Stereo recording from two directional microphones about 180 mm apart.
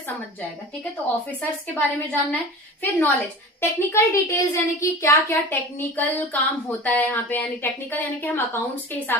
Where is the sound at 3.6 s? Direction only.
15° left (ahead or behind).